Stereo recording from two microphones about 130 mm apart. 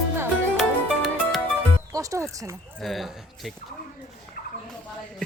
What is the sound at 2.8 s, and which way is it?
Speech, centre (ahead or behind).